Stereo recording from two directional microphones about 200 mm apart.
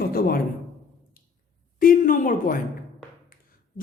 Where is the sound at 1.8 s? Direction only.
45° left (ahead or behind).